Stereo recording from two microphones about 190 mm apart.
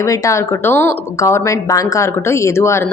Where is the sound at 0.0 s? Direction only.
15° left (ahead or behind).